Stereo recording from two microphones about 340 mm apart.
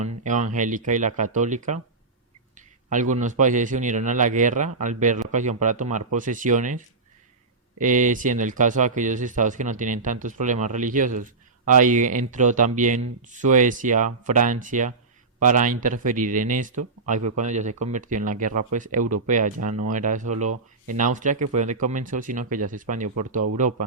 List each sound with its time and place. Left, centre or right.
0.3 s speech: right